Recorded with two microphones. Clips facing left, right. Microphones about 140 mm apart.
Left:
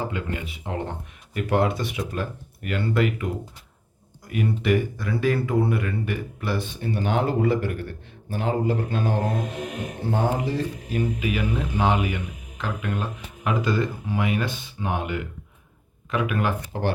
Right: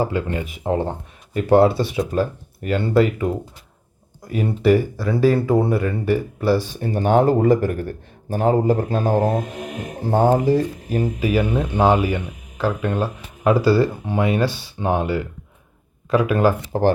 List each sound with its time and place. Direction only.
0.0 s speech: 35° right (ahead or behind)
4.3 s speech: 35° right (ahead or behind)